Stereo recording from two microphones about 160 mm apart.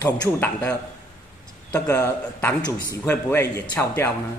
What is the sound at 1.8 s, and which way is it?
A man's voice, 20° left (ahead or behind).